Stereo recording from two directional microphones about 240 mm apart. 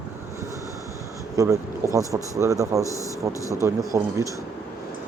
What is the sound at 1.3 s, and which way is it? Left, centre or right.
Speech, centre.